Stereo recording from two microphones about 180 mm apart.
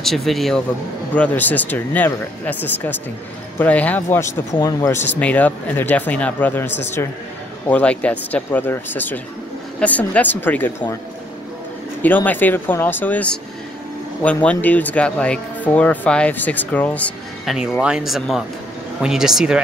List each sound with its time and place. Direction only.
0.0 s speech: centre (ahead or behind)
12.0 s speech: 10° left (ahead or behind)
17.6 s speech: 5° right (ahead or behind)